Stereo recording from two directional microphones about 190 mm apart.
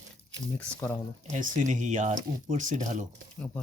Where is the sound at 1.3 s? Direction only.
45° right (ahead or behind).